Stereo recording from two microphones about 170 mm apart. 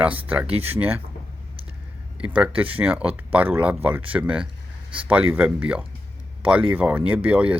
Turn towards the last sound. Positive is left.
turn(degrees=-5)  # may be behind; listen again after turning